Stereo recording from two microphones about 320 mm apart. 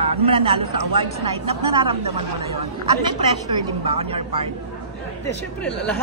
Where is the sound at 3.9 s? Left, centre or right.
Centre.